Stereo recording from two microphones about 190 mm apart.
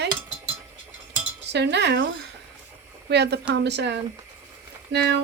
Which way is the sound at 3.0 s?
60° right (ahead or behind).